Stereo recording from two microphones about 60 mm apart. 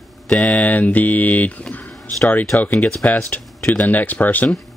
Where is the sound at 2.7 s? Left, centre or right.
Left.